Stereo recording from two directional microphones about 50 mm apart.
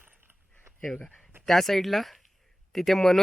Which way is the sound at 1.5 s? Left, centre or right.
Centre.